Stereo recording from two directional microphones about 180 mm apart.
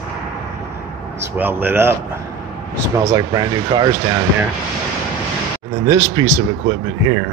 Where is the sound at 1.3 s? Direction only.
10° right (ahead or behind).